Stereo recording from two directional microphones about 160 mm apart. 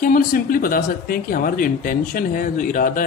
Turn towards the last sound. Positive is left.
turn(degrees=60)  # may be behind; listen again after turning